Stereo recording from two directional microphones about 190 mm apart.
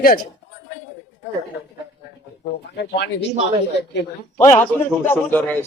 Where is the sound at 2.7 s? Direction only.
65° left (ahead or behind).